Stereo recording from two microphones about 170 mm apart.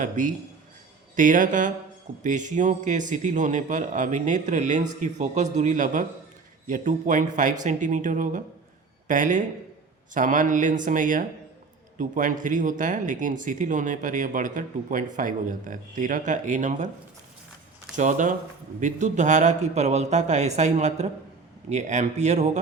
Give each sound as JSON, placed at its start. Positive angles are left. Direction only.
{"t": 0.0, "sound": "speech", "side_deg": -50}
{"t": 17.9, "sound": "speech", "side_deg": -45}